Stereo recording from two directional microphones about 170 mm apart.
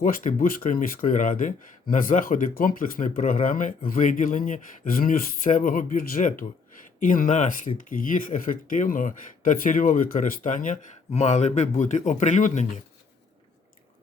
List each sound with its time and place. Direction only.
0.0 s speech: 50° left (ahead or behind)